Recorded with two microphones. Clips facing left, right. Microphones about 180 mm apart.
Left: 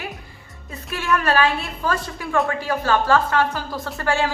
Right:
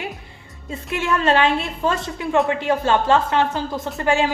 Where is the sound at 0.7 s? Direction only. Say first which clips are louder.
Right 1 dB; 25° right (ahead or behind).